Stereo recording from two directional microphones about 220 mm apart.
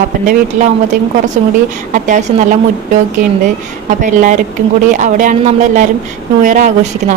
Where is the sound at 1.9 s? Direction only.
35° right (ahead or behind).